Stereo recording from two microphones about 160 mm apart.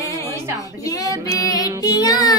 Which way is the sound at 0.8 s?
20° left (ahead or behind).